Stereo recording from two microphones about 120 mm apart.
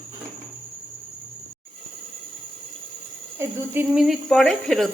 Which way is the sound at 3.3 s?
20° right (ahead or behind).